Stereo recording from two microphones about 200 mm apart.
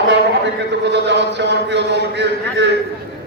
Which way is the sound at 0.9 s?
60° right (ahead or behind).